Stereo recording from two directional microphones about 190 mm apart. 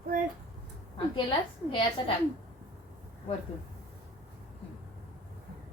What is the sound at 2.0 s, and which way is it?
Speech, 25° left (ahead or behind).